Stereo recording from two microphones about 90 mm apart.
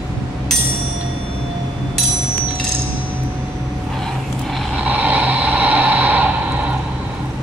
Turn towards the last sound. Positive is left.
turn(degrees=-15)  # may be behind; listen again after turning